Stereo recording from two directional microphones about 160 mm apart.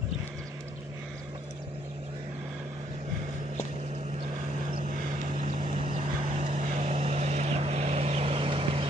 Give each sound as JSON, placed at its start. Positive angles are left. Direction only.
{"t": 5.4, "sound": "vehicle", "side_deg": -45}